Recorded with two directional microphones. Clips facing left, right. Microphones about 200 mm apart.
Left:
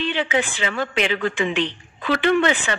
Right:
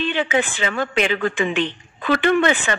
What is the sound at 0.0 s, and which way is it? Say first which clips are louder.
Speech: right 2 dB; 50° right (ahead or behind).